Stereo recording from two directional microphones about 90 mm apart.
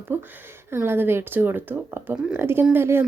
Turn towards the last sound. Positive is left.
turn(degrees=-25)  # may be behind; listen again after turning